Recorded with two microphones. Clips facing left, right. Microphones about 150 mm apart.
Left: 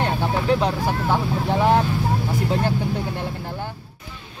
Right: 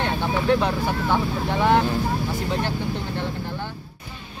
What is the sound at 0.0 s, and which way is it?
Vehicle, 35° left (ahead or behind).